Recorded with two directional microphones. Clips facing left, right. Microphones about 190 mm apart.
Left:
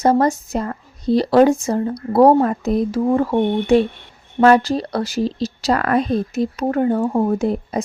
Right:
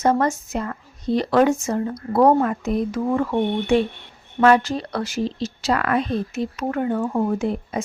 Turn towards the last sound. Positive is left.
turn(degrees=40)  # may be behind; listen again after turning